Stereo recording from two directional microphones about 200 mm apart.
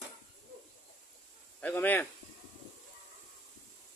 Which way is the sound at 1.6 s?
10° left (ahead or behind).